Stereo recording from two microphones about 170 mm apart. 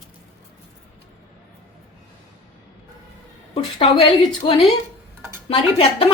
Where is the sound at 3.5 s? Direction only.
35° left (ahead or behind).